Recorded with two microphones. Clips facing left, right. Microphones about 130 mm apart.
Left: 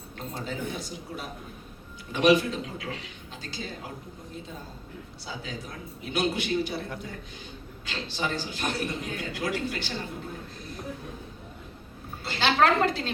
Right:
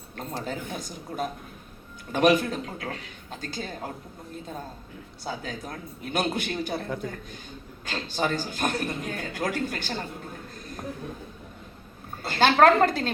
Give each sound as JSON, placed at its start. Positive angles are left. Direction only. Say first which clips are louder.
{"t": 0.4, "sound": "a man's voice", "louder": "even", "side_deg": -45}
{"t": 5.2, "sound": "a man's voice", "louder": "right 5 dB", "side_deg": -50}
{"t": 12.2, "sound": "a sound", "louder": "right 5 dB", "side_deg": -45}